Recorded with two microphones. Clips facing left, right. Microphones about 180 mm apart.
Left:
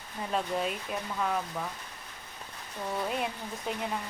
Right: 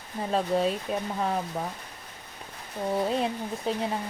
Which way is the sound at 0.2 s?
30° right (ahead or behind).